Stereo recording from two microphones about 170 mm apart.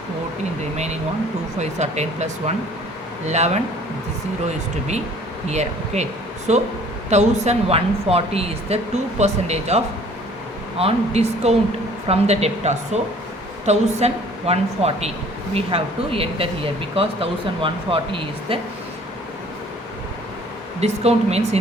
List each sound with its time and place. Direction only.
1.5 s speech: 40° right (ahead or behind)
5.5 s speech: 40° right (ahead or behind)
20.8 s speech: 40° right (ahead or behind)